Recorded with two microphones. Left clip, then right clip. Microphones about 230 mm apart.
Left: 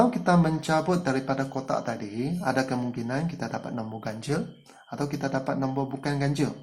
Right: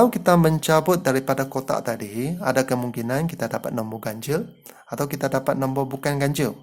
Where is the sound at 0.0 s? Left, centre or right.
Right.